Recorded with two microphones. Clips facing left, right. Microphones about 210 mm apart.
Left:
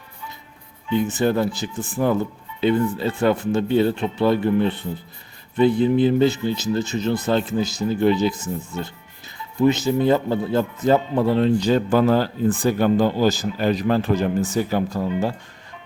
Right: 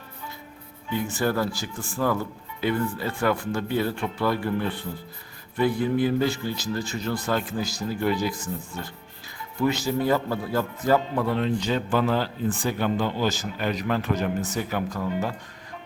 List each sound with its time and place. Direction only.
0.9 s speech: 20° left (ahead or behind)